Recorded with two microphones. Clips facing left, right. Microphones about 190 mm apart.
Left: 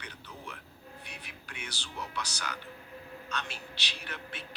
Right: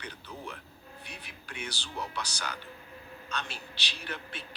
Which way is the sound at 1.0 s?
35° right (ahead or behind).